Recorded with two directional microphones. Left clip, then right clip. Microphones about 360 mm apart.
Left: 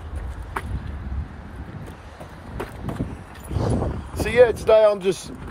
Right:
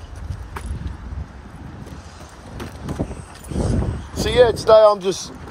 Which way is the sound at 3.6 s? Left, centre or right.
Centre.